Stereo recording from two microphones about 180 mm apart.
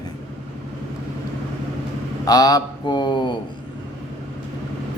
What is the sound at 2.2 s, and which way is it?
A man's voice, 20° left (ahead or behind).